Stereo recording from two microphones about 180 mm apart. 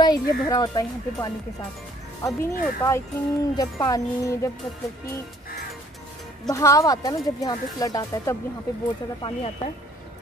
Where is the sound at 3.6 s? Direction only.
20° left (ahead or behind).